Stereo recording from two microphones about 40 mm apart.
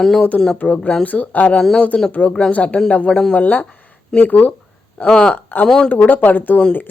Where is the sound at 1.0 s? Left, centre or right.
Left.